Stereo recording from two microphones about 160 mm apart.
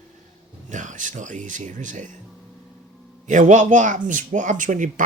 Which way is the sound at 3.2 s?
50° right (ahead or behind).